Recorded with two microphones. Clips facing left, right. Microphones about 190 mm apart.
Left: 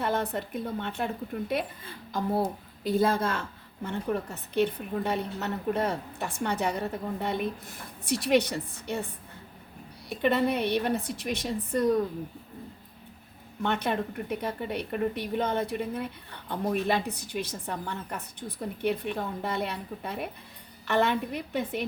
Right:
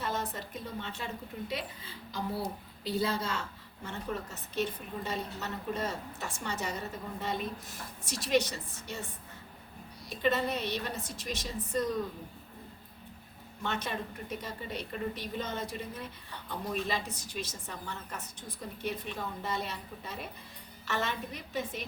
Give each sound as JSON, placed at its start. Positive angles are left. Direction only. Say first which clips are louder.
{"t": 0.0, "sound": "a woman's voice", "louder": "left 7 dB", "side_deg": 60}
{"t": 10.1, "sound": "speech", "louder": "left 5 dB", "side_deg": 60}
{"t": 13.6, "sound": "speech", "louder": "left 7 dB", "side_deg": 60}